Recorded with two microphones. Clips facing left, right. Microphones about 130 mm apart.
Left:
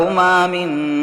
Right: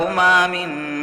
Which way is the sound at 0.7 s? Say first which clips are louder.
Left 8 dB; 15° left (ahead or behind).